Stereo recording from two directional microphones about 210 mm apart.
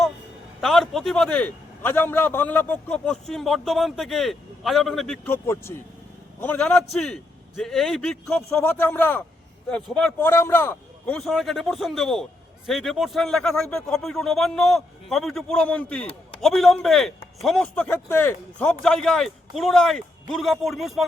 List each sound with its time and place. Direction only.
0.6 s a man's voice: centre (ahead or behind)